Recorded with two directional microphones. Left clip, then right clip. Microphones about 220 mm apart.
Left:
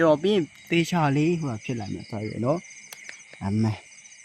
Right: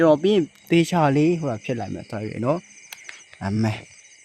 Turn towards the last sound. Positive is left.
turn(degrees=-45)  # may be behind; listen again after turning